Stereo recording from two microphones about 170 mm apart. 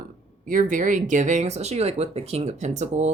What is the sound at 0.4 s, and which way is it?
Speech, 50° right (ahead or behind).